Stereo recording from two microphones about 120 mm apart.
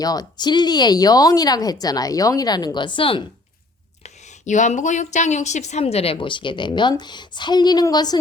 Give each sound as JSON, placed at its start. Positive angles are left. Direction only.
{"t": 0.0, "sound": "speech", "side_deg": 30}
{"t": 4.0, "sound": "speech", "side_deg": 80}